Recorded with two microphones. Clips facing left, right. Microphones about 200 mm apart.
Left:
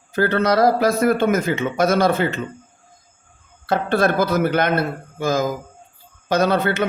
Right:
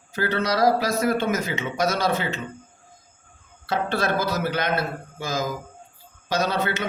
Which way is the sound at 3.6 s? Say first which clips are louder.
Left 6 dB; 55° left (ahead or behind).